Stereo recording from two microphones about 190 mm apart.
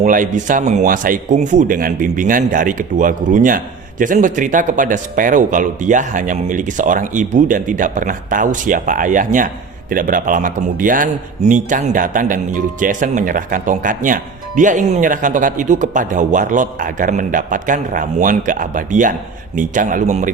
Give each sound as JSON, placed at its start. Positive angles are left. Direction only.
{"t": 0.0, "sound": "speech", "side_deg": -40}